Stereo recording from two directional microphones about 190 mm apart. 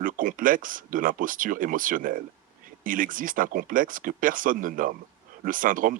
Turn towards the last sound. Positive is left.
turn(degrees=-45)  # may be behind; listen again after turning